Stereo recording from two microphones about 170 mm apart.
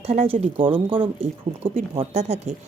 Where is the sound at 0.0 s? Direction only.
35° right (ahead or behind).